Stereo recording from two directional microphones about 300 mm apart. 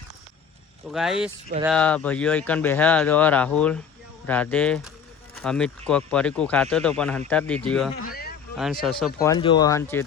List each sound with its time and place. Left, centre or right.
0.9 s speech: centre
8.0 s a sound: left
8.5 s speech: centre